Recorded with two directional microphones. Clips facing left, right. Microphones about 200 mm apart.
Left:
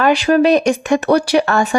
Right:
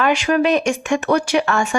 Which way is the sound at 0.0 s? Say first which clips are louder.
Left 4 dB; 35° left (ahead or behind).